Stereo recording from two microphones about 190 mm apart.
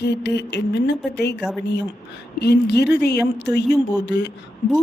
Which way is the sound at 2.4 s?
60° left (ahead or behind).